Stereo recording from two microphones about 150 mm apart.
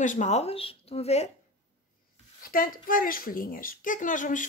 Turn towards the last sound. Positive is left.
turn(degrees=60)  # may be behind; listen again after turning